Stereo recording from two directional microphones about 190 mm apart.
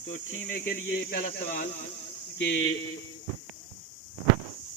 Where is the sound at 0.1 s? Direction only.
80° left.